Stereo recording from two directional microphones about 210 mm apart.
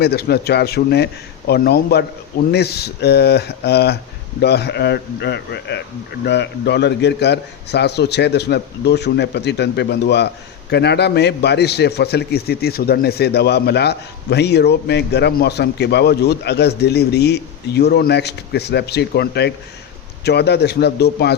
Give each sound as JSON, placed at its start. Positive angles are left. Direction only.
{"t": 0.0, "sound": "a man's voice", "side_deg": 50}